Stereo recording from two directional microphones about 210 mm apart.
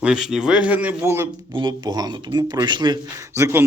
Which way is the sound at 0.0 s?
5° right (ahead or behind).